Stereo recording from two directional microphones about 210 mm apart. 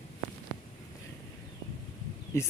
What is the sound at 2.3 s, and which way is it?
Speech, 15° left (ahead or behind).